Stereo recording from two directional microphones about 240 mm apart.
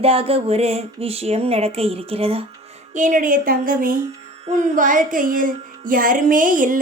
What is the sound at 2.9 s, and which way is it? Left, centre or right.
Music, right.